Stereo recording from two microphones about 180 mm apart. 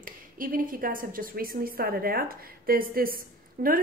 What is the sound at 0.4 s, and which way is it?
A woman's voice, 50° right (ahead or behind).